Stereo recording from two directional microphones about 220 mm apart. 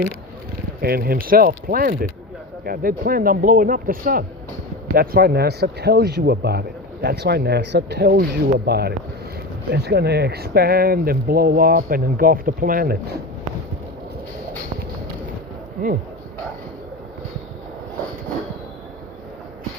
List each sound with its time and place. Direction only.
0.8 s speech: 45° right (ahead or behind)